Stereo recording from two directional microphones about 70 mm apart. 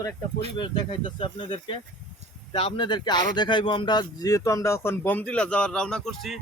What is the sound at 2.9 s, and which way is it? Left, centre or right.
Speech, left.